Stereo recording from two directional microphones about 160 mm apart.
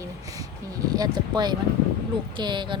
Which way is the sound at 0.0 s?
20° right (ahead or behind).